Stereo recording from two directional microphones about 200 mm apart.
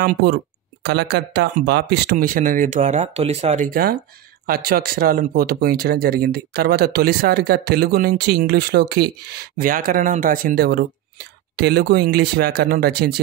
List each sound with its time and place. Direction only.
0.0 s speech: 45° right (ahead or behind)